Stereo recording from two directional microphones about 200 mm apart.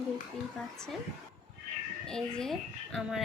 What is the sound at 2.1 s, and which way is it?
A woman's voice, 5° left (ahead or behind).